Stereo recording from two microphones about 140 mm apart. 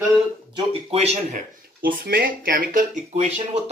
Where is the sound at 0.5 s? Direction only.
45° right (ahead or behind).